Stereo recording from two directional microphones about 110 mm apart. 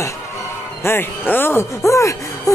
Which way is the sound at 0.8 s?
20° left (ahead or behind).